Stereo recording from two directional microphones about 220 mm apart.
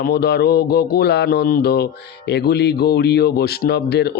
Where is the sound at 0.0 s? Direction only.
45° left (ahead or behind).